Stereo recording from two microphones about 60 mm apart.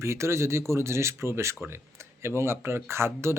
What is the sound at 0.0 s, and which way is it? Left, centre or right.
Speech, right.